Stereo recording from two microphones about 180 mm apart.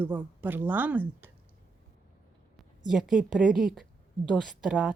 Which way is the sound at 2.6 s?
Centre (ahead or behind).